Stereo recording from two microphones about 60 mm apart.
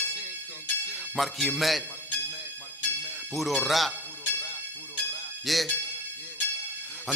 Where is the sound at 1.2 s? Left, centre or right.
Centre.